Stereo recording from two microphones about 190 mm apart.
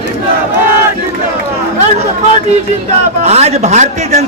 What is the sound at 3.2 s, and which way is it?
A man's voice, 35° right (ahead or behind).